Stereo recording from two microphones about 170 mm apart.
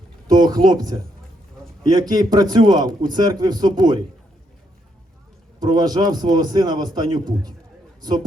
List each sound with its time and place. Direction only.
0.3 s a man's voice: 25° right (ahead or behind)
5.5 s a man's voice: 25° right (ahead or behind)